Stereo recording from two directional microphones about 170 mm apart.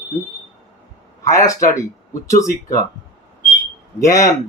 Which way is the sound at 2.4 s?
20° left (ahead or behind).